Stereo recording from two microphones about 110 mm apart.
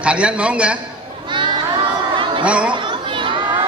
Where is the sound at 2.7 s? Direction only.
50° right (ahead or behind).